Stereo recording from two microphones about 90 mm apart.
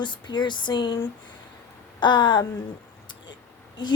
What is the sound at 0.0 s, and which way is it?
Speech, 60° left (ahead or behind).